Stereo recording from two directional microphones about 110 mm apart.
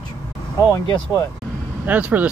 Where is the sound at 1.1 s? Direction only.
35° left (ahead or behind).